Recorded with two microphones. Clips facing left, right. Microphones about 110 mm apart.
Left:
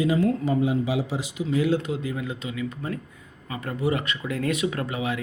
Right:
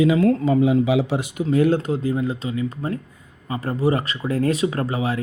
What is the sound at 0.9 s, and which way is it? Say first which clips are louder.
Speech: right 6 dB; 65° right (ahead or behind).